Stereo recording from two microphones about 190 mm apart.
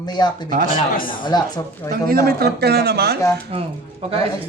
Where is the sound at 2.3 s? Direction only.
55° right (ahead or behind).